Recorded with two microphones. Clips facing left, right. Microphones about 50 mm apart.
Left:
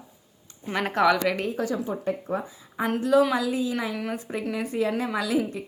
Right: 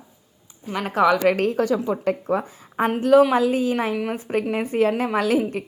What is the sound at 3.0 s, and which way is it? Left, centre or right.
Speech, right.